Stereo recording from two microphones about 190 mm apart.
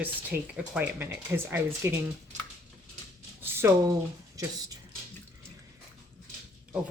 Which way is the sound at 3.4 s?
15° right (ahead or behind).